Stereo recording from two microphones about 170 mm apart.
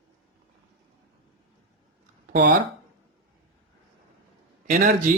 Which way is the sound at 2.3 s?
50° right (ahead or behind).